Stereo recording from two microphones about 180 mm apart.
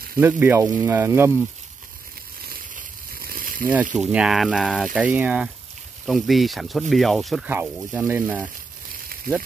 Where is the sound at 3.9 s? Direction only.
5° right (ahead or behind).